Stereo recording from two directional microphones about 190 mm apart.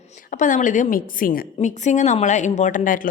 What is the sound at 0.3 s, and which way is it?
A woman's voice, 40° left (ahead or behind).